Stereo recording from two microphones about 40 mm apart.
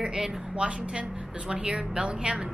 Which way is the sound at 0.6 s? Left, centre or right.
Right.